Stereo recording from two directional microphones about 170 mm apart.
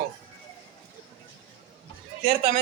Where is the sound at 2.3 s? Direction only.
60° right (ahead or behind).